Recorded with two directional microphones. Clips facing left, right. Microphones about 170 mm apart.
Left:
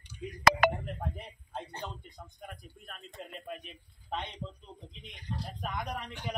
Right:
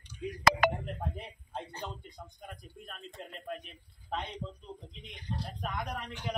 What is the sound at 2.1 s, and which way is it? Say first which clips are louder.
A man's voice: even; centre (ahead or behind).